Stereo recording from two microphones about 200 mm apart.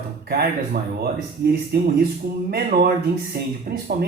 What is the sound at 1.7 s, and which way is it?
Speech, 55° right (ahead or behind).